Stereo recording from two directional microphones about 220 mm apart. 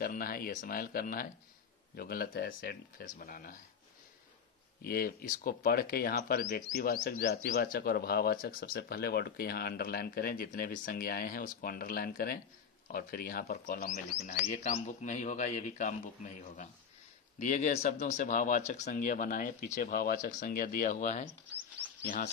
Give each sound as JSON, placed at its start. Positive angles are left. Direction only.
{"t": 0.0, "sound": "speech", "side_deg": 40}
{"t": 4.8, "sound": "speech", "side_deg": 40}
{"t": 21.3, "sound": "speech", "side_deg": -90}